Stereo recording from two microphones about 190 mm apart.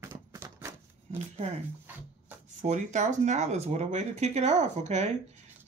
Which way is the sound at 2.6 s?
40° right (ahead or behind).